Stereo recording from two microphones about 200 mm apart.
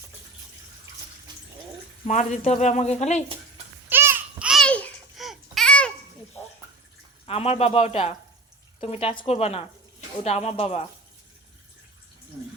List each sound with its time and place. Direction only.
2.0 s speech: 35° left (ahead or behind)
3.8 s babbling: 10° right (ahead or behind)
7.3 s speech: 30° left (ahead or behind)